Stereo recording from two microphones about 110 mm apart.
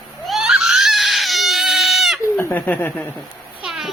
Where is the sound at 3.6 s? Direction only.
5° right (ahead or behind).